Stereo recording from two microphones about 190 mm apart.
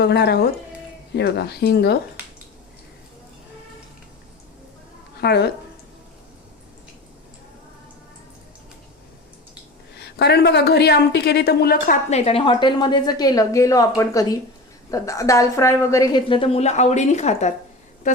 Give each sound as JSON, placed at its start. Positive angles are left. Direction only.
{"t": 0.0, "sound": "a woman's voice", "side_deg": 60}
{"t": 5.2, "sound": "a woman's voice", "side_deg": 60}
{"t": 10.0, "sound": "a woman's voice", "side_deg": 60}
{"t": 12.1, "sound": "a woman's voice", "side_deg": 30}
{"t": 18.0, "sound": "a sound", "side_deg": 40}